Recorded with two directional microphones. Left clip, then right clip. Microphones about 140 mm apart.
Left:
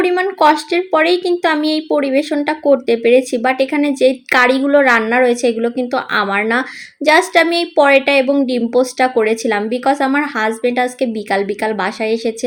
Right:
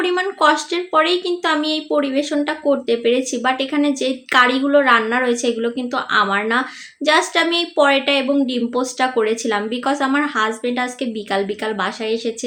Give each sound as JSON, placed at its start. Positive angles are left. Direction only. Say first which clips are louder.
{"t": 0.0, "sound": "speech", "louder": "left 4 dB", "side_deg": 40}